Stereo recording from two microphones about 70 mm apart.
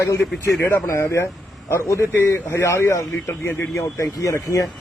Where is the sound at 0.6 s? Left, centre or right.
Left.